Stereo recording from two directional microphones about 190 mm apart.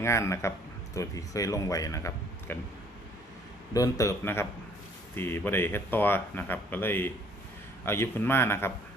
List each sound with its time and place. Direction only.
0.0 s speech: 15° left (ahead or behind)
3.8 s speech: 15° left (ahead or behind)